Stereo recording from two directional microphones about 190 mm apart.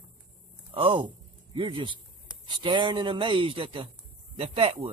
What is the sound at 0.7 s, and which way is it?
Speech, 25° right (ahead or behind).